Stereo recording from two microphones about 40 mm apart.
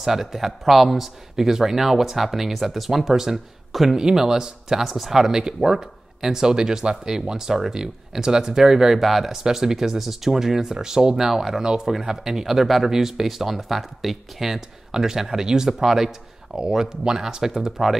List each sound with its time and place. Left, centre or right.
0.0 s speech: centre